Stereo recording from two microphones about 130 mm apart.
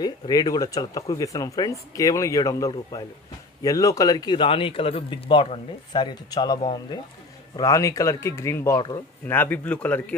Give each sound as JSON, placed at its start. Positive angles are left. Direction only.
{"t": 0.0, "sound": "a man's voice", "side_deg": 30}